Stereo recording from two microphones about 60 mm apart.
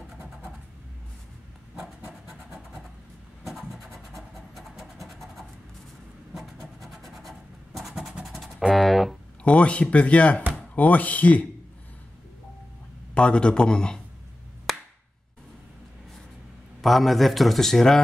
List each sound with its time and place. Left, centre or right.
2.2 s vehicle: centre
3.4 s a sound: centre
8.2 s music: centre
9.4 s speech: left
13.1 s a man's voice: centre
16.8 s a man's voice: centre